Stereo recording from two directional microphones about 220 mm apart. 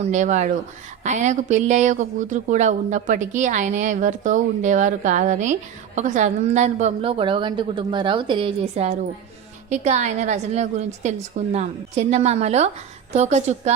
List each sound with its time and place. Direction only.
0.0 s speech: 30° right (ahead or behind)